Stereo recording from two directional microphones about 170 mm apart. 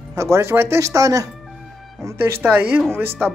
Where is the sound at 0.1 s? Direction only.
15° right (ahead or behind).